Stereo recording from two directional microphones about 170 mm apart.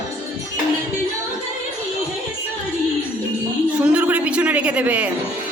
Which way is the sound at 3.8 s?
5° right (ahead or behind).